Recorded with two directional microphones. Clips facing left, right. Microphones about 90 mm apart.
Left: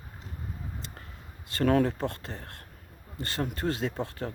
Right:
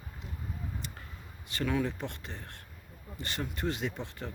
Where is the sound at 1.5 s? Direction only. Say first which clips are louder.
Left 7 dB; 45° left (ahead or behind).